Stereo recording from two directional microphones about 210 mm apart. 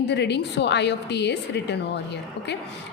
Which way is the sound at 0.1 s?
55° left (ahead or behind).